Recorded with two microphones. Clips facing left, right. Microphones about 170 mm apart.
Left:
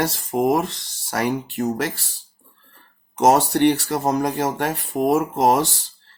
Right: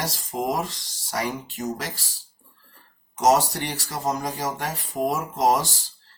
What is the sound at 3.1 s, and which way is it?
Speech, 60° left (ahead or behind).